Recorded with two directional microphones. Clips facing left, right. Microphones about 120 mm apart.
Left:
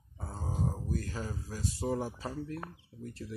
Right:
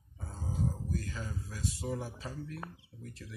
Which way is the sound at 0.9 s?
35° left (ahead or behind).